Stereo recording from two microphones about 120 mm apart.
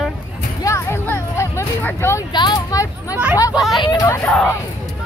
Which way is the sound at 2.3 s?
40° left (ahead or behind).